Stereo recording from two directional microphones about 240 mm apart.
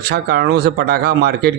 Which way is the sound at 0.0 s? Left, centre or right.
Right.